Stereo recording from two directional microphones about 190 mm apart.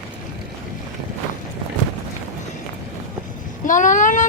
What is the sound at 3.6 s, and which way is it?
Vehicle, 40° left (ahead or behind).